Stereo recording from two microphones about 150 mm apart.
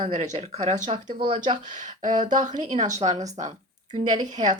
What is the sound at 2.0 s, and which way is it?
Speech, 60° right (ahead or behind).